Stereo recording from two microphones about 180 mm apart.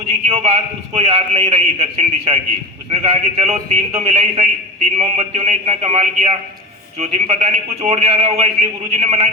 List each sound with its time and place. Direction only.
0.3 s a man's voice: 35° right (ahead or behind)